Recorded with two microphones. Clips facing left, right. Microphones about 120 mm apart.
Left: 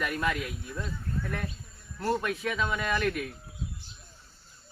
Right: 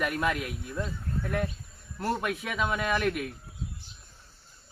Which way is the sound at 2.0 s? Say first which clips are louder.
Left 1 dB; 5° right (ahead or behind).